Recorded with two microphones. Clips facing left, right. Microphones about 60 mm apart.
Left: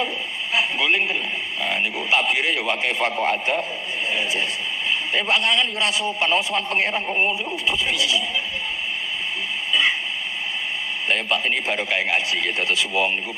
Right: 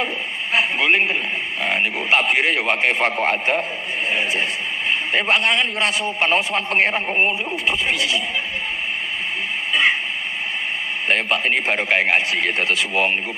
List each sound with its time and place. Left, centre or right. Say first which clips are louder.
0.5 s radio: right 3 dB; right
1.6 s a man's voice: right 3 dB; right
9.7 s radio: right 3 dB; right
11.1 s speech: right 3 dB; right